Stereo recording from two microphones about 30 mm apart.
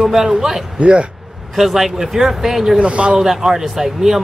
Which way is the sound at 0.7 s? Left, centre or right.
Right.